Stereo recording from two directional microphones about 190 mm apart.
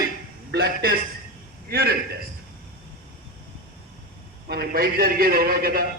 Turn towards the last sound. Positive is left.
turn(degrees=-50)  # may be behind; listen again after turning